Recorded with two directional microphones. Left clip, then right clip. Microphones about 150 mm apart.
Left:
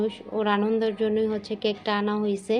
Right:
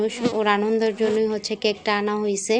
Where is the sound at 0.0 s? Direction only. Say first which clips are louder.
Right 5 dB; 45° right (ahead or behind).